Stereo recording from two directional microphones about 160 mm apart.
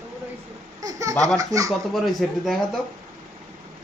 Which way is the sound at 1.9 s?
Centre (ahead or behind).